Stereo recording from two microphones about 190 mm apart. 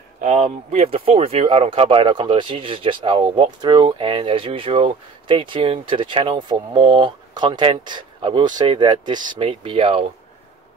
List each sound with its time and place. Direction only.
0.2 s speech: 40° right (ahead or behind)